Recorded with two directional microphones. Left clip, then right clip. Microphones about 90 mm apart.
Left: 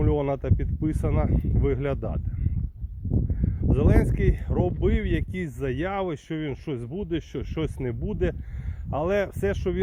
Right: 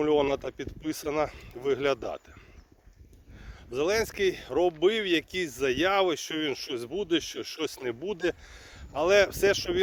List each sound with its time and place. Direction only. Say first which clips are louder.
0.0 s speech: right 1 dB; 35° right (ahead or behind)
3.8 s speech: even; 40° right (ahead or behind)
7.2 s speech: left 1 dB; 55° right (ahead or behind)
7.9 s speech: right 2 dB; 40° right (ahead or behind)